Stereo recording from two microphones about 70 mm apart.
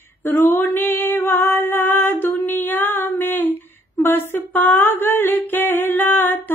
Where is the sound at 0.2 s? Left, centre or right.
Left.